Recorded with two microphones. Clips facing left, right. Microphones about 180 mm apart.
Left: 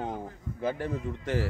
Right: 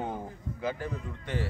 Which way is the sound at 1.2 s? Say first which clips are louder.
Left 4 dB; 90° left.